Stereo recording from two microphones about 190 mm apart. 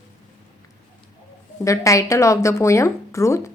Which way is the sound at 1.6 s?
15° left (ahead or behind).